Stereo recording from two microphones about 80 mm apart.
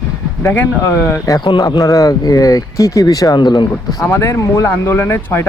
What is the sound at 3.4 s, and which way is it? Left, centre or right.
Speech, left.